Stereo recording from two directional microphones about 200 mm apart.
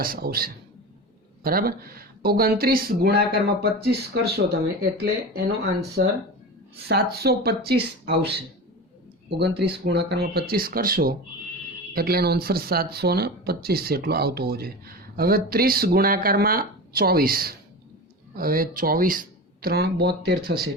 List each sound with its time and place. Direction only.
0.0 s speech: 50° right (ahead or behind)
9.4 s speech: 55° right (ahead or behind)